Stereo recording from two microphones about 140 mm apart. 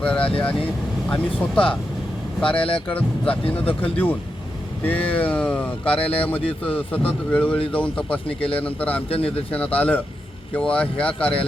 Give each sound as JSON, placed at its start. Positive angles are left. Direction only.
{"t": 0.0, "sound": "speech", "side_deg": 10}
{"t": 2.4, "sound": "speech", "side_deg": 40}
{"t": 3.8, "sound": "speech", "side_deg": 10}
{"t": 9.0, "sound": "speech", "side_deg": 45}
{"t": 9.5, "sound": "speech", "side_deg": 10}